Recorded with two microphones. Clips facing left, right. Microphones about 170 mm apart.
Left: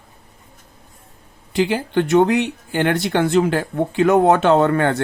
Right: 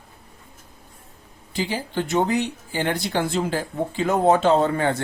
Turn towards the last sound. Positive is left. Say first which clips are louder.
# left 4 dB
turn(degrees=65)  # may be behind; listen again after turning